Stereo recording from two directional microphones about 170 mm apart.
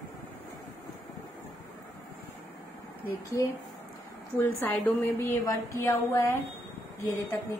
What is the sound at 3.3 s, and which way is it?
A woman's voice, 20° left (ahead or behind).